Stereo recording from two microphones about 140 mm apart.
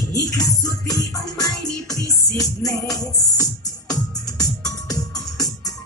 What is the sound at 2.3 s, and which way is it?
Music, 25° left (ahead or behind).